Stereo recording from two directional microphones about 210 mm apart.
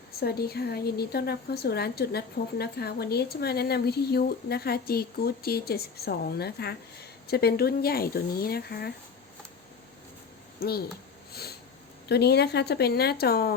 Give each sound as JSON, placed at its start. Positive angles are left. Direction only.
{"t": 0.2, "sound": "a woman's voice", "side_deg": 50}
{"t": 10.6, "sound": "speech", "side_deg": 45}
{"t": 11.3, "sound": "a sound", "side_deg": 50}
{"t": 12.0, "sound": "a woman's voice", "side_deg": 50}